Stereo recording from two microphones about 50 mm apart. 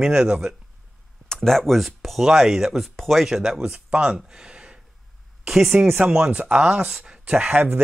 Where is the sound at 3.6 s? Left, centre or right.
Right.